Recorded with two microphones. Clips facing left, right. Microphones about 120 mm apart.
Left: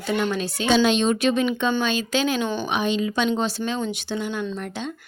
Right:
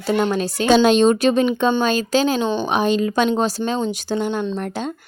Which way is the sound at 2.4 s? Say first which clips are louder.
Right 5 dB; 20° right (ahead or behind).